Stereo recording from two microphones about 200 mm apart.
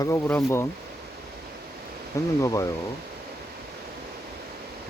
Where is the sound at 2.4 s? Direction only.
15° left (ahead or behind).